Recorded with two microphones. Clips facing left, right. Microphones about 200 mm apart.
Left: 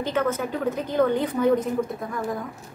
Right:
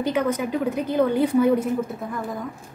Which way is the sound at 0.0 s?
10° right (ahead or behind).